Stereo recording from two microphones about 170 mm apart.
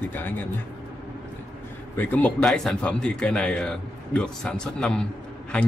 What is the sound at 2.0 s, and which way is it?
A man's voice, 10° left (ahead or behind).